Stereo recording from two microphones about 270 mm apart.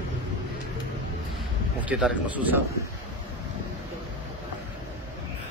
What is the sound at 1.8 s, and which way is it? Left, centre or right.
Speech, centre.